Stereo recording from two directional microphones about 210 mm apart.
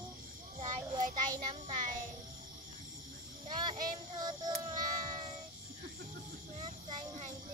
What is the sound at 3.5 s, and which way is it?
Child singing, 20° right (ahead or behind).